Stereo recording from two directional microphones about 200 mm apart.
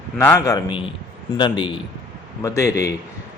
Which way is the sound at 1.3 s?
25° left (ahead or behind).